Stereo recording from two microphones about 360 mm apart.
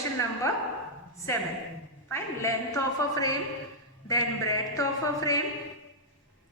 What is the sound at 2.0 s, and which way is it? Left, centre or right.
A woman's voice, centre.